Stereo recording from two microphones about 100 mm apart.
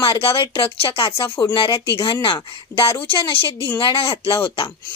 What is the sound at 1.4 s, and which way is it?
A woman's voice, 50° left (ahead or behind).